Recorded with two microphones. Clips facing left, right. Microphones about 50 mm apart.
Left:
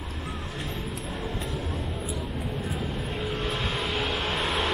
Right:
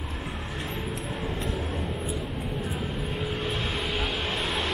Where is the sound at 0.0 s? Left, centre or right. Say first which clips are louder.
Right 1 dB; centre.